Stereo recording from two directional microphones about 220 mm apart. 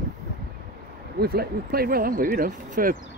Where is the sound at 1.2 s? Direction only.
45° right (ahead or behind).